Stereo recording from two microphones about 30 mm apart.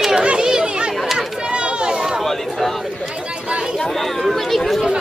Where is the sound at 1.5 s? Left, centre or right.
Right.